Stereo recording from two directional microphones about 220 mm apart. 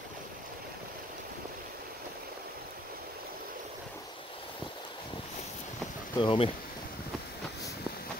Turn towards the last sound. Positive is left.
turn(degrees=25)  # may be behind; listen again after turning